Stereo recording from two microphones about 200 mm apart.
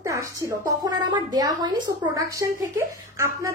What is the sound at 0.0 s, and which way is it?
A woman's voice, 15° right (ahead or behind).